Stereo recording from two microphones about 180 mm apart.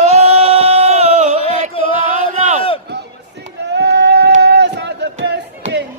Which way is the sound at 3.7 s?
65° right (ahead or behind).